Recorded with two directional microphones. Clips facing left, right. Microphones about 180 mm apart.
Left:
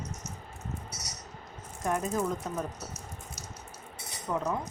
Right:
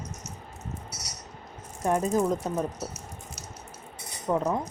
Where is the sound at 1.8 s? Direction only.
30° right (ahead or behind).